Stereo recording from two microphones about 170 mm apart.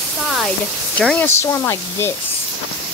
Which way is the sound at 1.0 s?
5° left (ahead or behind).